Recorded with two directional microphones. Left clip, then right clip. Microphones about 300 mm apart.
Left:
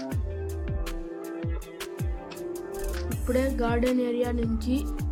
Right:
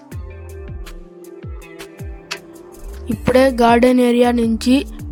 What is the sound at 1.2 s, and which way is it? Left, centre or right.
Music, centre.